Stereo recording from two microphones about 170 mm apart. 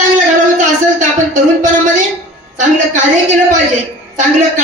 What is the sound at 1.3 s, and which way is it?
Speech, 50° right (ahead or behind).